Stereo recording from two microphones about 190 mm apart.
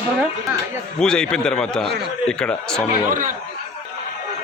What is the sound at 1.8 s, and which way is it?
Speech, 60° right (ahead or behind).